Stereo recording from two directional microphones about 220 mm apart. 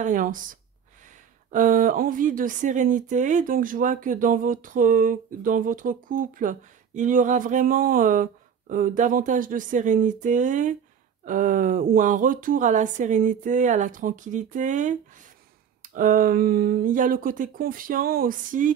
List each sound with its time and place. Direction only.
0.0 s speech: 40° right (ahead or behind)